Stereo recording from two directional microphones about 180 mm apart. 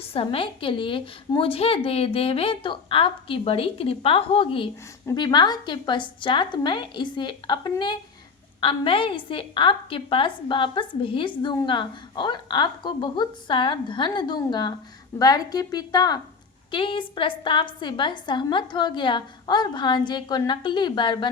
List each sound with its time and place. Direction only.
0.0 s a woman's voice: 30° left (ahead or behind)